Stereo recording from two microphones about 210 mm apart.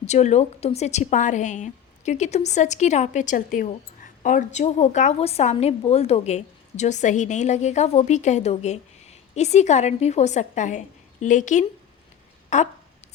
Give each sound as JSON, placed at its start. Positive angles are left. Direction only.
{"t": 0.0, "sound": "a woman's voice", "side_deg": 35}